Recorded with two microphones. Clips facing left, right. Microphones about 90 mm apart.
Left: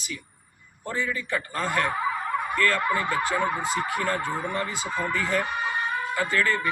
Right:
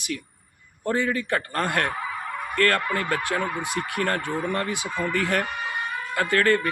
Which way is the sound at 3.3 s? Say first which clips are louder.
Left 1 dB; 20° left (ahead or behind).